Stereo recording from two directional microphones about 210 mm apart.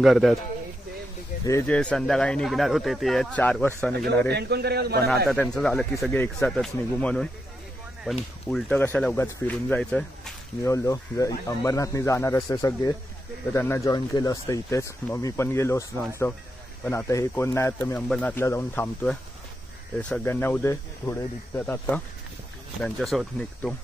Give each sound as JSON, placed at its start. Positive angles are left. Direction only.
{"t": 0.0, "sound": "speech", "side_deg": 0}
{"t": 1.4, "sound": "speech", "side_deg": 10}
{"t": 4.3, "sound": "a man's voice", "side_deg": -50}
{"t": 5.2, "sound": "speech", "side_deg": 5}
{"t": 16.8, "sound": "speech", "side_deg": 15}